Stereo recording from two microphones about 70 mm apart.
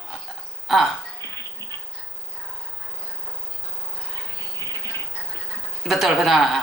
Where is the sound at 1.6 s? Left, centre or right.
Left.